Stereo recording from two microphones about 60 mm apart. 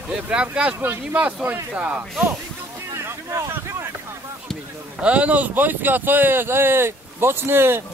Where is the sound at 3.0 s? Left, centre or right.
Right.